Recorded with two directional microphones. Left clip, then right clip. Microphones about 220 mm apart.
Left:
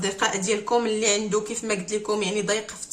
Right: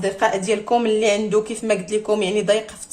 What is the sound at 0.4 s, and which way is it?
Speech, 25° right (ahead or behind).